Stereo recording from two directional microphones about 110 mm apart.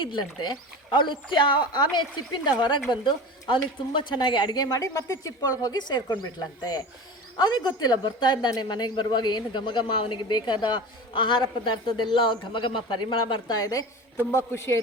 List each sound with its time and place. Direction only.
0.0 s a woman's voice: 45° left (ahead or behind)
14.3 s a man's voice: 25° left (ahead or behind)